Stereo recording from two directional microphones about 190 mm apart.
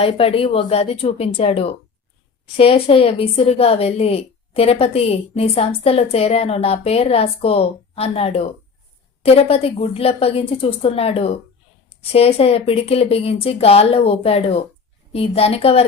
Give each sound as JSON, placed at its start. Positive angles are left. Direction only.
{"t": 0.0, "sound": "a woman's voice", "side_deg": 30}